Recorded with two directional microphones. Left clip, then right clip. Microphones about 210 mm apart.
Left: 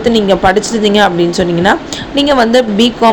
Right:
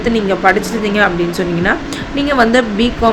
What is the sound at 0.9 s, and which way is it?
A woman's voice, 25° left (ahead or behind).